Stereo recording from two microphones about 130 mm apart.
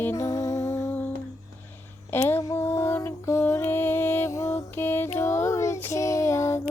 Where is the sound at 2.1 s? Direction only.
15° left (ahead or behind).